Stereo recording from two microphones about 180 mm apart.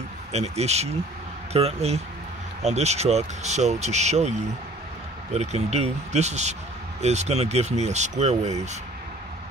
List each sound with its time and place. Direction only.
0.3 s speech: 35° right (ahead or behind)